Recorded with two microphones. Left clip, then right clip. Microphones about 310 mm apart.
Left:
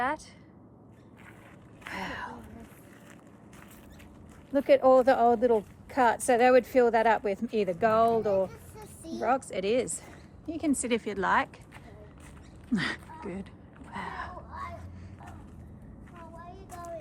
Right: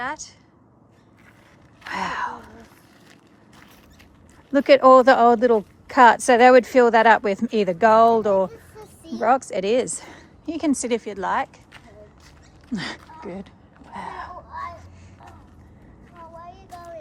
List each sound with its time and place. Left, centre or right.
0.0 s a woman's voice: centre
1.9 s gasp: right
4.5 s speech: right; by 11.4 s centre
12.7 s speech: centre
13.9 s a sound: centre